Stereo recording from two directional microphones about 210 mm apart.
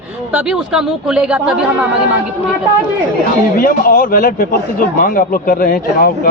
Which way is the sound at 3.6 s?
45° left (ahead or behind).